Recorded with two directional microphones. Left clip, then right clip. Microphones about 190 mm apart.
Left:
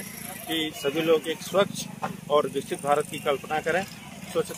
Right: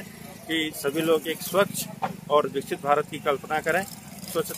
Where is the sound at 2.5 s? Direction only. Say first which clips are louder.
Right 1 dB; 5° right (ahead or behind).